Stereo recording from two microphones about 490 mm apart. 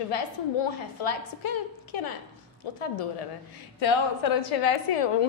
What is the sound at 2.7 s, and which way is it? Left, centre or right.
A woman's voice, left.